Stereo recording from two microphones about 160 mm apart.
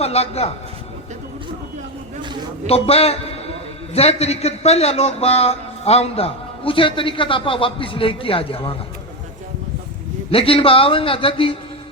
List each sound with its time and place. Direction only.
0.0 s a man's voice: 40° left (ahead or behind)
2.6 s a man's voice: 40° left (ahead or behind)
10.3 s a man's voice: 35° left (ahead or behind)